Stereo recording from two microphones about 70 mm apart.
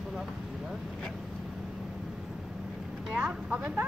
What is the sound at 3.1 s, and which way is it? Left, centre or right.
Speech, centre.